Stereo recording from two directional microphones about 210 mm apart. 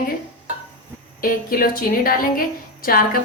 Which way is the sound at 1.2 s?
45° left (ahead or behind).